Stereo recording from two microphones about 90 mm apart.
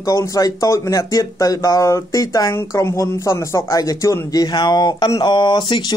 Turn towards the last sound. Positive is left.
turn(degrees=55)  # may be behind; listen again after turning